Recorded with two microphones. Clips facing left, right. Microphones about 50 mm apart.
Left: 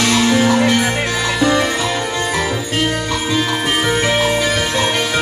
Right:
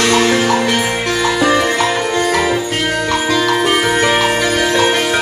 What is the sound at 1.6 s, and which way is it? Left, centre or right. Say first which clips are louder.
Music: right 4 dB; right.